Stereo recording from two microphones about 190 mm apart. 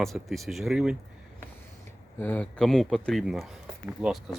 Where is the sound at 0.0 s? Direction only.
Centre (ahead or behind).